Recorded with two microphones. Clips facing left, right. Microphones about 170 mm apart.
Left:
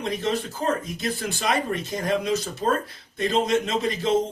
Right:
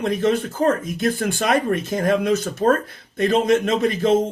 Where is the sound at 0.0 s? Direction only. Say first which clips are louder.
Right 6 dB; 50° right (ahead or behind).